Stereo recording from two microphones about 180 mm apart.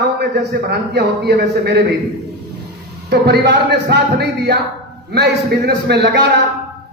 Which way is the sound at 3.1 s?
65° right (ahead or behind).